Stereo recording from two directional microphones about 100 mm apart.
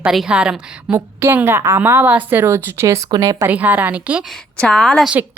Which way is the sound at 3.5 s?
15° right (ahead or behind).